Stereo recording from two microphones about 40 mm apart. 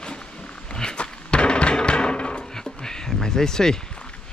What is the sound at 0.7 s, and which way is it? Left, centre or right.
Music, left.